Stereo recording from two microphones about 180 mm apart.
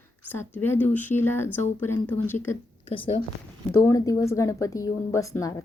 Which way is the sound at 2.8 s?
30° left (ahead or behind).